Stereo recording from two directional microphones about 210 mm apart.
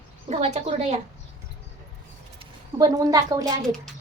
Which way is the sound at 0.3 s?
30° right (ahead or behind).